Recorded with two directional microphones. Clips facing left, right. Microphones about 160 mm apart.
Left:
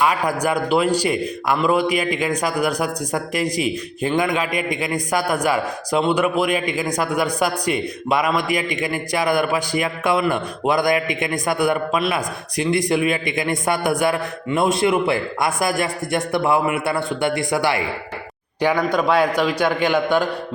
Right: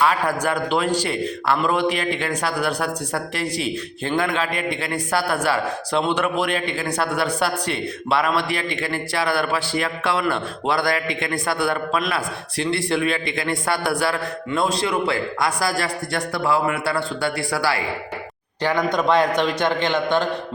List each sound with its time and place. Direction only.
0.0 s a man's voice: 10° left (ahead or behind)